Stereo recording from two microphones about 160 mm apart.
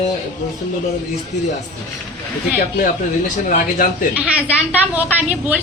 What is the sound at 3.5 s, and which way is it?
Speech, 55° left (ahead or behind).